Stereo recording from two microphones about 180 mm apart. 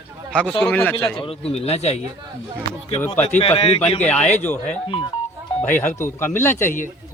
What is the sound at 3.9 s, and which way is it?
Speech, 5° left (ahead or behind).